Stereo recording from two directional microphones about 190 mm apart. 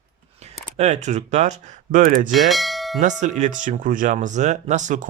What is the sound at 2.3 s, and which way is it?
Speech, centre (ahead or behind).